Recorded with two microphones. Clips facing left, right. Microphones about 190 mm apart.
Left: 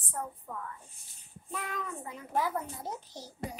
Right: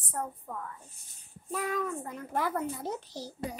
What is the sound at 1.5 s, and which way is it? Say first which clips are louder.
A child's voice: right 6 dB; 45° right (ahead or behind).